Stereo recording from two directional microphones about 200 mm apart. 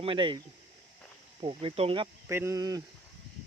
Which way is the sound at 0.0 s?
25° right (ahead or behind).